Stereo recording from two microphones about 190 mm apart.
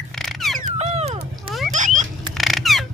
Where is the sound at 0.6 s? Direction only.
35° right (ahead or behind).